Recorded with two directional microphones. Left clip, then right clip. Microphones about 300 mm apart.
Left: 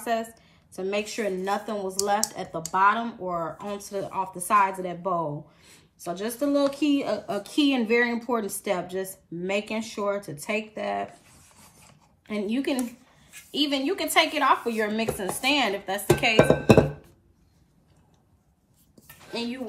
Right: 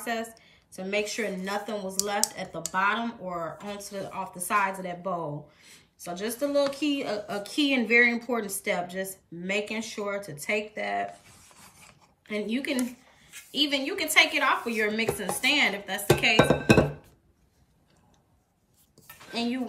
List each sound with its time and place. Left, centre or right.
0.0 s a woman's voice: centre
11.1 s rub: centre
12.3 s speech: centre
19.3 s speech: centre